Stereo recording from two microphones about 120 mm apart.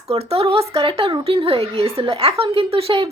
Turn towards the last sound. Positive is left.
turn(degrees=-50)  # may be behind; listen again after turning